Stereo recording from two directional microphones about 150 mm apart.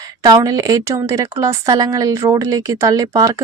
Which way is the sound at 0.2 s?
25° right (ahead or behind).